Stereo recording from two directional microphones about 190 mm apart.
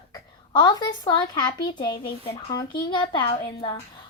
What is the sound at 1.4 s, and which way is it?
A child's voice, 25° left (ahead or behind).